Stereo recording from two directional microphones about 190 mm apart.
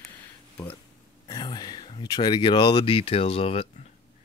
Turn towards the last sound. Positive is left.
turn(degrees=30)  # may be behind; listen again after turning